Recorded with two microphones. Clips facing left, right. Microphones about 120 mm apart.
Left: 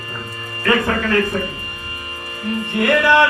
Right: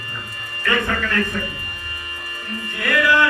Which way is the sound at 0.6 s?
35° left (ahead or behind).